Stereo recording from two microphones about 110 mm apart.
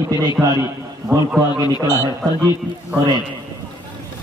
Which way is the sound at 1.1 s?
30° right (ahead or behind).